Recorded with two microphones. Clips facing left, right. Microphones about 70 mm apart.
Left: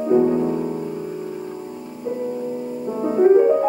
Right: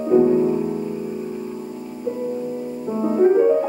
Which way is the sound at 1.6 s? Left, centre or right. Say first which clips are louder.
Right 1 dB; centre.